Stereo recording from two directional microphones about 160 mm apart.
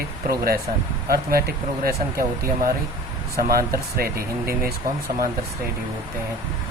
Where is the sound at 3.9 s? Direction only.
70° right (ahead or behind).